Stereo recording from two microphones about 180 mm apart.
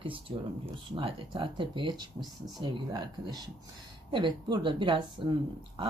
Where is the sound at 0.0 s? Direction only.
30° right (ahead or behind).